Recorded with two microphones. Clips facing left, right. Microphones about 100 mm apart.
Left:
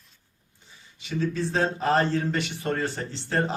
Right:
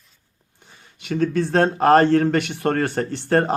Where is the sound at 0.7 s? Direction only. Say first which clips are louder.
Right 5 dB; 60° right (ahead or behind).